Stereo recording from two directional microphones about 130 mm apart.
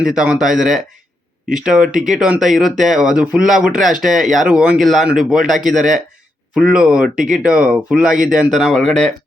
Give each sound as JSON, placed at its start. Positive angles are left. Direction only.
{"t": 0.0, "sound": "speech", "side_deg": -5}